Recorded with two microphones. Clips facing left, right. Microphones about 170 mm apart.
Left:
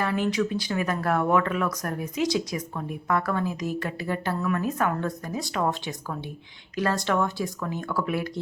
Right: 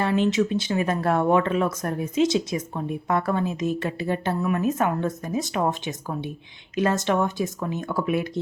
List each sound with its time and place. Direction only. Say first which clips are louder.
0.0 s speech: right 4 dB; 25° right (ahead or behind)